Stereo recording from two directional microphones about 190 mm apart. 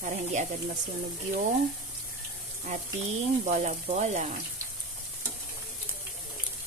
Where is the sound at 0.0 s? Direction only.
40° right (ahead or behind).